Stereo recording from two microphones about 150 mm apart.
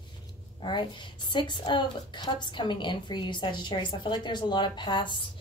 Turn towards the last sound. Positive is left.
turn(degrees=30)  # may be behind; listen again after turning